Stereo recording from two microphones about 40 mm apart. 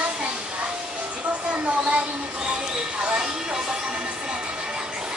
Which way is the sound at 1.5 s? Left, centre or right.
Right.